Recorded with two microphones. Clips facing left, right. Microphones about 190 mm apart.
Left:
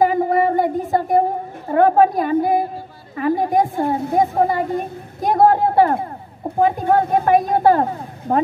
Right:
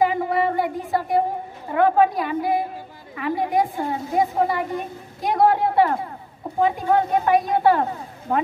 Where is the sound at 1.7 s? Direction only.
40° left (ahead or behind).